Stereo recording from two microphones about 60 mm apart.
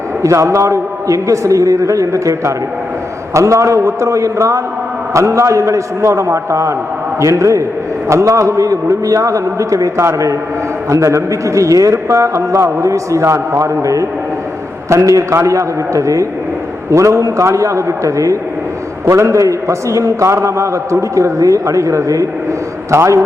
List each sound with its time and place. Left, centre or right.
0.2 s a man's voice: right